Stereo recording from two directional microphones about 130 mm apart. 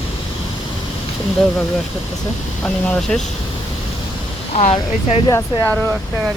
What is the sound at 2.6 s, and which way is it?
Speech, 10° left (ahead or behind).